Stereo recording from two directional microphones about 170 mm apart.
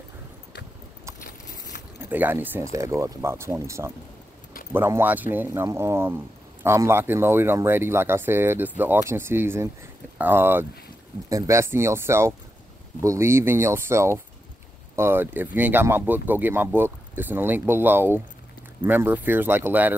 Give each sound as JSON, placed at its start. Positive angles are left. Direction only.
{"t": 2.0, "sound": "speech", "side_deg": -10}